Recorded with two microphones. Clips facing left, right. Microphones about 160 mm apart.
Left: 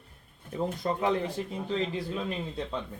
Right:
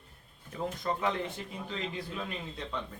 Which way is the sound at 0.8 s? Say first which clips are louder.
Left 2 dB; 35° left (ahead or behind).